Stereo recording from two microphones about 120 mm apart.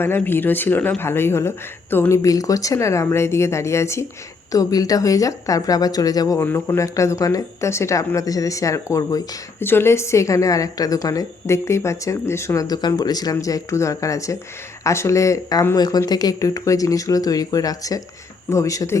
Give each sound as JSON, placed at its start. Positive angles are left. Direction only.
{"t": 0.0, "sound": "a woman's voice", "side_deg": 20}
{"t": 6.4, "sound": "a woman's voice", "side_deg": 20}
{"t": 9.6, "sound": "a woman's voice", "side_deg": 20}